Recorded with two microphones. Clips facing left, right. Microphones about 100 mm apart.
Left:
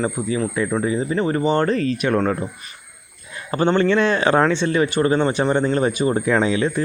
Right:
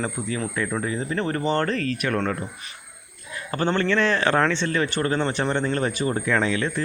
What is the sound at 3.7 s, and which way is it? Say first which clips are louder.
Speech: left 4 dB; 20° left (ahead or behind).